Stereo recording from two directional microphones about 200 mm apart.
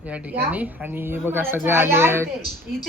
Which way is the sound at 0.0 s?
5° right (ahead or behind).